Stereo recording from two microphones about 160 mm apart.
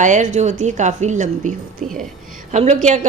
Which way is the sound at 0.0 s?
50° right (ahead or behind).